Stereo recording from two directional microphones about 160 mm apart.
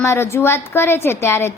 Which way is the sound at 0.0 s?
15° left (ahead or behind).